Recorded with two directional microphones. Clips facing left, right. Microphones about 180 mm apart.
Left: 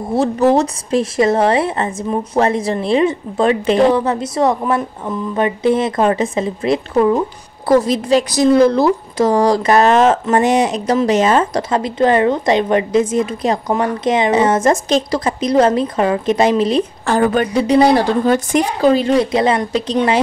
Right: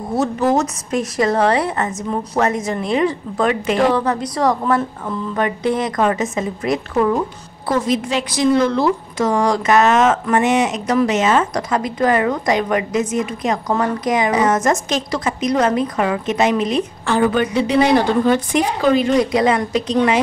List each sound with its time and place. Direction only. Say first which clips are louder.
0.1 s a woman's voice: left 4 dB; 30° left (ahead or behind)
7.6 s a woman's voice: left 5 dB; 35° left (ahead or behind)
17.1 s a woman's voice: left 2 dB; 45° left (ahead or behind)